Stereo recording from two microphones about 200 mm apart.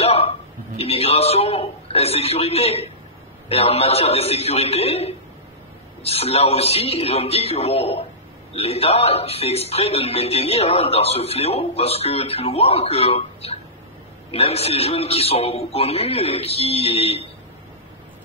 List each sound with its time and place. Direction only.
0.0 s a man's voice: 30° left (ahead or behind)